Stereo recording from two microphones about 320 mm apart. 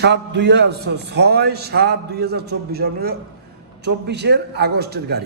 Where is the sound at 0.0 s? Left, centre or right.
Right.